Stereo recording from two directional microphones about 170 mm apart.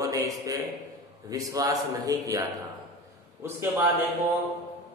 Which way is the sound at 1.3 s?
20° right (ahead or behind).